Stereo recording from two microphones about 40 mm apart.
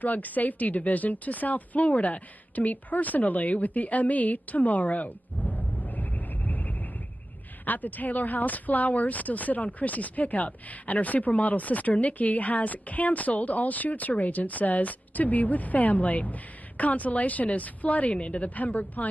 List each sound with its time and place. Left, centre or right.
0.0 s a woman's voice: left
18.1 s a woman's voice: left
18.5 s a woman's voice: left